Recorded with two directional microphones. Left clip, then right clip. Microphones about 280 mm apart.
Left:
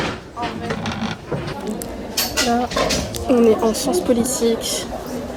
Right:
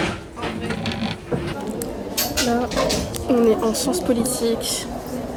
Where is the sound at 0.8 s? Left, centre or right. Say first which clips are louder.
Left 1 dB; left.